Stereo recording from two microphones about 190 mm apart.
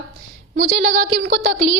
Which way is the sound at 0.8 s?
45° right (ahead or behind).